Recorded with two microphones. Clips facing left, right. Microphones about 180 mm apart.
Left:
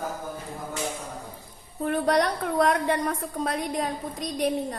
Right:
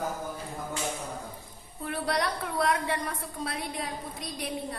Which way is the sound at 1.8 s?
45° left (ahead or behind).